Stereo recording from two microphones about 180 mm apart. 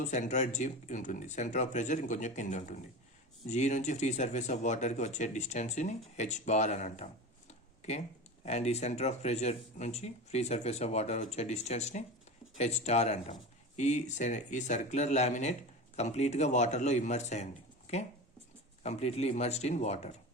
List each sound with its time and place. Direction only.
0.0 s speech: 40° left (ahead or behind)